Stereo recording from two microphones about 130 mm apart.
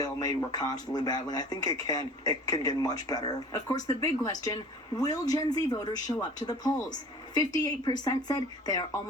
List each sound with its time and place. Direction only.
0.0 s speech: 30° left (ahead or behind)